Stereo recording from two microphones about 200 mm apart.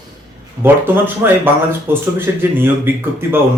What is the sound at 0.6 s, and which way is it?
Speech, 10° right (ahead or behind).